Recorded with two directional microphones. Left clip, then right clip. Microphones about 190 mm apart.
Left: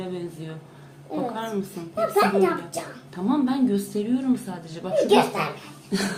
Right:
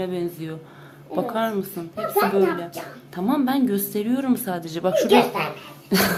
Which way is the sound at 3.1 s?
25° right (ahead or behind).